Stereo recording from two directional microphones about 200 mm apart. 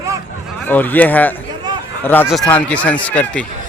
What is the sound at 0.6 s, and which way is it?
Speech, 10° left (ahead or behind).